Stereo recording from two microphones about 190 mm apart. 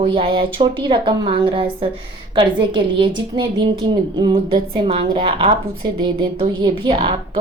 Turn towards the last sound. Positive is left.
turn(degrees=-25)  # may be behind; listen again after turning